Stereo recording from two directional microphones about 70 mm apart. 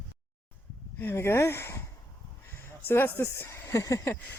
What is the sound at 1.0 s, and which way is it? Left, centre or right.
Speech, left.